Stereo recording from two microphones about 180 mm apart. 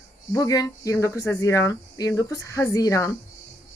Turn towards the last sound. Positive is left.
turn(degrees=15)  # may be behind; listen again after turning